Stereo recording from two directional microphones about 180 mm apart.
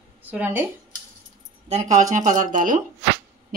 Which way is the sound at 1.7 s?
40° right (ahead or behind).